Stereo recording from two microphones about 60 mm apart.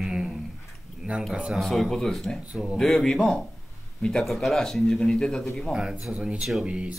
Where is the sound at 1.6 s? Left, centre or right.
Centre.